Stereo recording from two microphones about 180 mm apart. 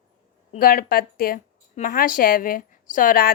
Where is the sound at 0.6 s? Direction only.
55° left (ahead or behind).